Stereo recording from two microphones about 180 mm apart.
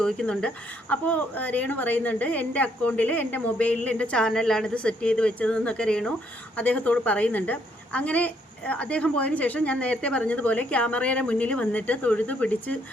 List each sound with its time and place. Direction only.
0.0 s a woman's voice: 5° left (ahead or behind)